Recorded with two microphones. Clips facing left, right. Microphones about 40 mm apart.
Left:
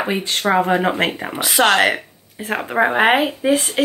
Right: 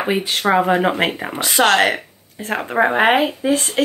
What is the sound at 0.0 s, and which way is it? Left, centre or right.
Speech, centre.